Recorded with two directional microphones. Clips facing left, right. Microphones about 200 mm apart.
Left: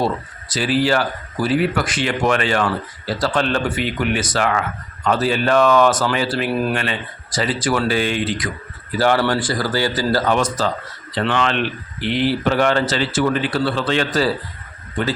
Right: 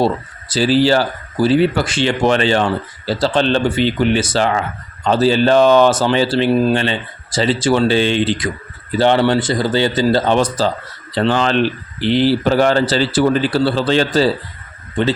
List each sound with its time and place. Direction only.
0.0 s speech: 30° right (ahead or behind)